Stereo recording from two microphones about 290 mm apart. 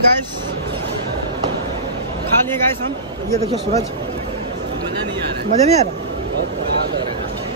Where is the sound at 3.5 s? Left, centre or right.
Right.